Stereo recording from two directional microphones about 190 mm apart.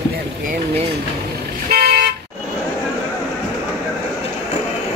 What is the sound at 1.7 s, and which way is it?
Vehicle, 55° right (ahead or behind).